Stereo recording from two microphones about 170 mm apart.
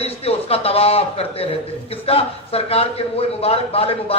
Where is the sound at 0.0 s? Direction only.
35° left (ahead or behind).